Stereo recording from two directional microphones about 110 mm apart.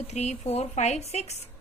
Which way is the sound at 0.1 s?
90° left.